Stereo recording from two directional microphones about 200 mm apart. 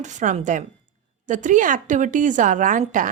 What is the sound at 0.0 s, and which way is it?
Speech, 35° right (ahead or behind).